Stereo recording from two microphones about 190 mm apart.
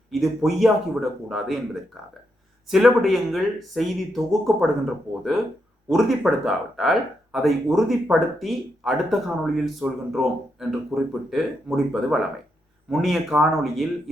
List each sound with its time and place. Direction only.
0.1 s speech: centre (ahead or behind)
5.9 s speech: centre (ahead or behind)